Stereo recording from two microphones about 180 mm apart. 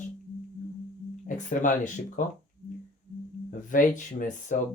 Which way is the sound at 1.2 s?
45° left (ahead or behind).